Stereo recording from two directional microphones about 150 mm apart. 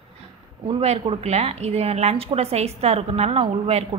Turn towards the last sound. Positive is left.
turn(degrees=-40)  # may be behind; listen again after turning